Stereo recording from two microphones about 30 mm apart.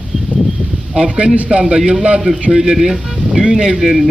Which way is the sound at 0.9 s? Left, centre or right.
Right.